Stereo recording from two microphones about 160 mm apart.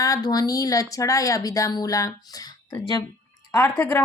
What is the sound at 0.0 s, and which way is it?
Speech, 25° left (ahead or behind).